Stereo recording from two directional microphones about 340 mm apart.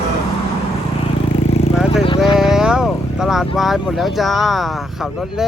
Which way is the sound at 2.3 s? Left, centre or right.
Centre.